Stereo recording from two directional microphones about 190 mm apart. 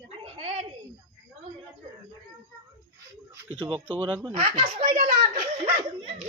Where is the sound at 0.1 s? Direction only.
30° right (ahead or behind).